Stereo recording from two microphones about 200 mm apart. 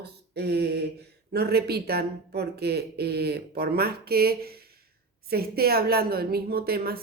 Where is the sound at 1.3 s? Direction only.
50° right (ahead or behind).